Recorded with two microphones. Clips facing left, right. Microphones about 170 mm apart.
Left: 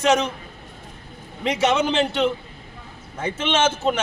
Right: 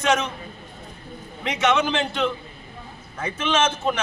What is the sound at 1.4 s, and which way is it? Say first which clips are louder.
A man's voice: left 2 dB; 30° left (ahead or behind).